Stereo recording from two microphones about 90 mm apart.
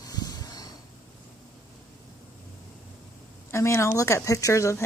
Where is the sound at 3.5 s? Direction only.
30° left (ahead or behind).